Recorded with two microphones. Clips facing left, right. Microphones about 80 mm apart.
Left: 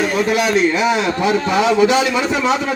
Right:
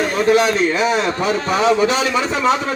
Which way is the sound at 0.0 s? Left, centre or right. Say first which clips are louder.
Right 2 dB; right.